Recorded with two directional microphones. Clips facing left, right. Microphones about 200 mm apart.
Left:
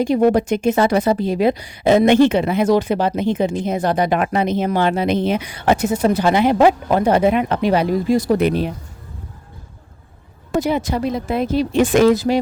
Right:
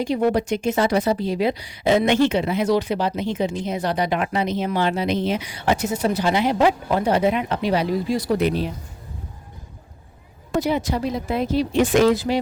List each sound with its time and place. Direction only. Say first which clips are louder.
0.0 s speech: left 5 dB; 50° left (ahead or behind)
10.6 s speech: left 2 dB; 50° left (ahead or behind)